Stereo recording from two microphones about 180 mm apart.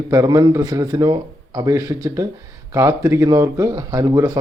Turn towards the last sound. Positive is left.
turn(degrees=-20)  # may be behind; listen again after turning